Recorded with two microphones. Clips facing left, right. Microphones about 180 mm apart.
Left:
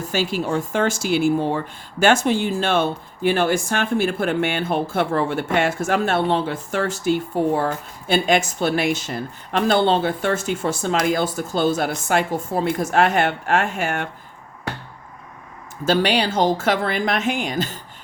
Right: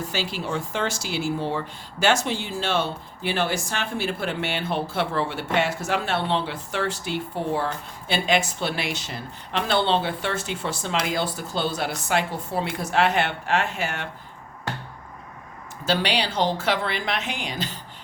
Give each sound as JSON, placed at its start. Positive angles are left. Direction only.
{"t": 0.1, "sound": "speech", "side_deg": 50}
{"t": 15.8, "sound": "speech", "side_deg": 50}